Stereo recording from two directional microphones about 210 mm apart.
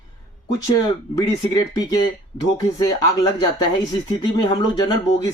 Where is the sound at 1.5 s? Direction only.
15° left (ahead or behind).